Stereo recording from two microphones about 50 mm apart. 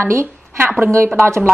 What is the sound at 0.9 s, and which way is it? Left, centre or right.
Speech, right.